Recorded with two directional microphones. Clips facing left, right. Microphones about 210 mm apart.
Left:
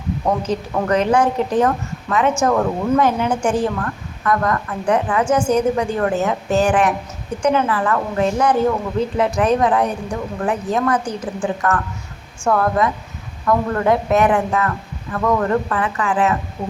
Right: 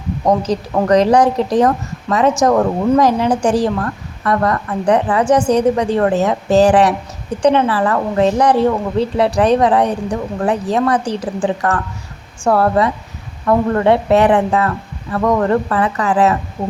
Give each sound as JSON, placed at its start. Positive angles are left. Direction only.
{"t": 0.3, "sound": "a woman's voice", "side_deg": -35}